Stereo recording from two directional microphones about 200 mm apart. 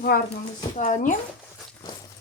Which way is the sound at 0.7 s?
40° left (ahead or behind).